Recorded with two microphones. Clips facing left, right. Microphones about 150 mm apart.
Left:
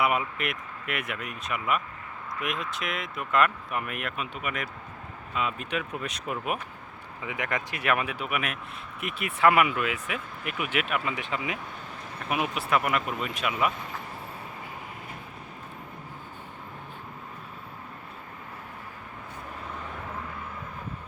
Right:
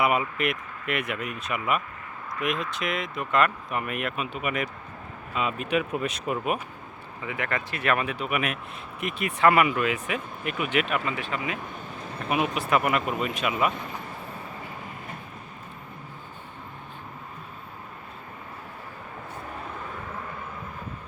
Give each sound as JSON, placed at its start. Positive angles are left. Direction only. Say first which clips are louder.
{"t": 0.0, "sound": "speech", "louder": "right 3 dB", "side_deg": 0}
{"t": 7.3, "sound": "speech", "louder": "right 1 dB", "side_deg": 15}
{"t": 11.2, "sound": "speech", "louder": "right 1 dB", "side_deg": 20}
{"t": 12.3, "sound": "speech", "louder": "right 2 dB", "side_deg": 0}